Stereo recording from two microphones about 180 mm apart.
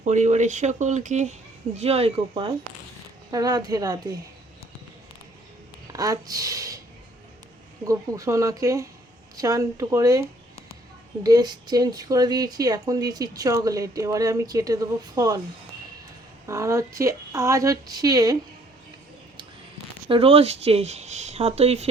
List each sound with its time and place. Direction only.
0.0 s speech: 40° right (ahead or behind); by 4.2 s 20° right (ahead or behind)
5.9 s speech: 20° right (ahead or behind)
7.9 s speech: 20° right (ahead or behind)
16.5 s speech: 15° right (ahead or behind)
20.1 s speech: 30° right (ahead or behind)